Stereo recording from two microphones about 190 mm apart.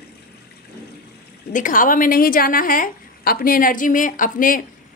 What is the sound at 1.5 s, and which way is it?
A woman's voice, 45° left (ahead or behind).